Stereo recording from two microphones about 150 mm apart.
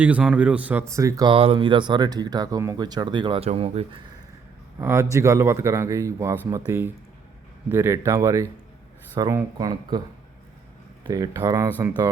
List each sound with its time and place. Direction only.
0.0 s speech: 10° right (ahead or behind)
1.3 s speech: 35° right (ahead or behind)
4.8 s a man's voice: 15° right (ahead or behind)
11.0 s a man's voice: 25° right (ahead or behind)